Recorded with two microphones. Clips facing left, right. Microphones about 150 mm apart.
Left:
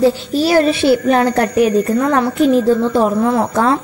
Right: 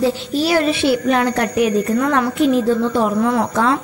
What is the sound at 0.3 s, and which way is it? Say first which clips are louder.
A woman's voice: left 4 dB; 40° left (ahead or behind).